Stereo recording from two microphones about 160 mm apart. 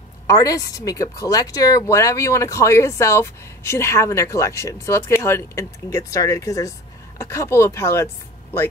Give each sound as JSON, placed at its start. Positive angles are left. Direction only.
{"t": 0.3, "sound": "speech", "side_deg": 20}